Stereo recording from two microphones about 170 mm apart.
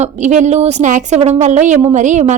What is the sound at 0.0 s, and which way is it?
Speech, 45° right (ahead or behind).